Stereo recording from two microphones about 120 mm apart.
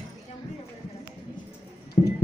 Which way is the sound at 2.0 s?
75° left (ahead or behind).